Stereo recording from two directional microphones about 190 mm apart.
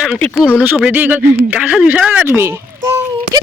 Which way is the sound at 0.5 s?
10° right (ahead or behind).